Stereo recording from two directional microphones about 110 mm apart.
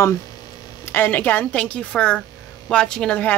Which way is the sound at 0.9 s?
15° left (ahead or behind).